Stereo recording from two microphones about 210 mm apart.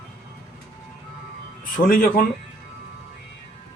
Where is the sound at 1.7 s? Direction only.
40° left (ahead or behind).